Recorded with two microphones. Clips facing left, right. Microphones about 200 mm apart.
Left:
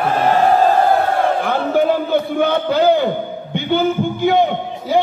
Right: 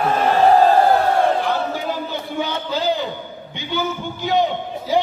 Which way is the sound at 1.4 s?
55° left (ahead or behind).